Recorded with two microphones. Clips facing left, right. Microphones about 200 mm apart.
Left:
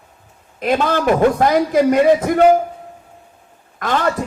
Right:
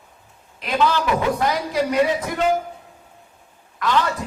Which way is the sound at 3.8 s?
50° left (ahead or behind).